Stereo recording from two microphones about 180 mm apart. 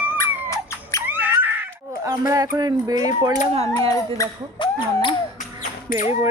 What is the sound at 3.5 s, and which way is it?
Speech, 35° right (ahead or behind).